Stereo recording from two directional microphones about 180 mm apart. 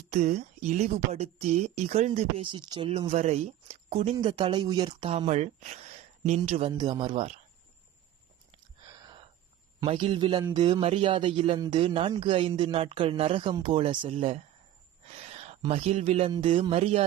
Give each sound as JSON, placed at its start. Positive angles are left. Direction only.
{"t": 0.1, "sound": "speech", "side_deg": -40}
{"t": 8.8, "sound": "a sound", "side_deg": -25}
{"t": 9.8, "sound": "speech", "side_deg": -30}